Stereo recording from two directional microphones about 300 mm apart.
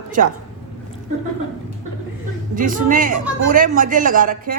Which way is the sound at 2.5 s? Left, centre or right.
Right.